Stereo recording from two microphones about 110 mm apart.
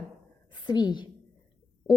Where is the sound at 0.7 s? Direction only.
40° left (ahead or behind).